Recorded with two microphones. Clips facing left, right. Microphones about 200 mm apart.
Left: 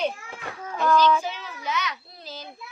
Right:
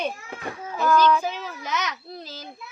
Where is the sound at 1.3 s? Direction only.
45° right (ahead or behind).